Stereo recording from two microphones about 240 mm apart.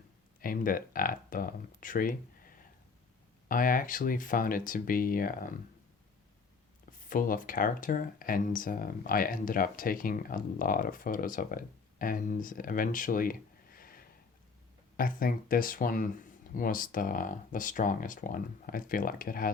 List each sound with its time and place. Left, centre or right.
0.4 s speech: left
3.5 s speech: left
7.1 s speech: left
13.7 s snort: left
14.9 s speech: left